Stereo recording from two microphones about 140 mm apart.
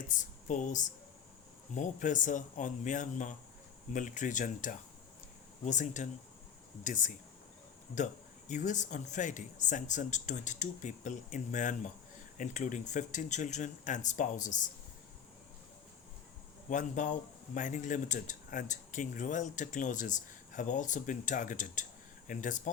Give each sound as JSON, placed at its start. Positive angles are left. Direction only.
{"t": 0.1, "sound": "a man's voice", "side_deg": 65}
{"t": 16.6, "sound": "a man's voice", "side_deg": 60}